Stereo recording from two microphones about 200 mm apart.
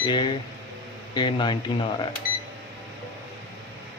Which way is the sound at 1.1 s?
20° left (ahead or behind).